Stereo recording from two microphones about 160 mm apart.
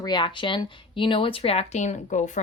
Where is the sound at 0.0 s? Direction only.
30° left (ahead or behind).